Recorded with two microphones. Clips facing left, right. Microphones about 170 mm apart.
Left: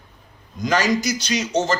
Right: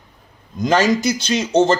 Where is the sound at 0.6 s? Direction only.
25° right (ahead or behind).